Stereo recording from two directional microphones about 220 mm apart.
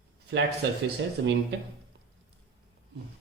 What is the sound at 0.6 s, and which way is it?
Speech, 50° right (ahead or behind).